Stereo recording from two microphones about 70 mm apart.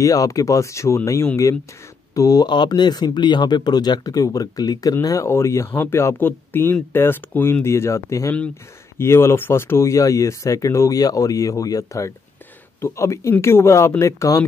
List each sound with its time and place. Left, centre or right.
0.0 s speech: left
2.1 s speech: left
2.4 s speech: left
5.0 s speech: left
5.3 s speech: left
7.6 s speech: left